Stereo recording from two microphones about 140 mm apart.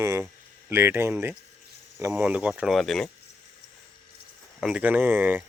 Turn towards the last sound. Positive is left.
turn(degrees=-10)  # may be behind; listen again after turning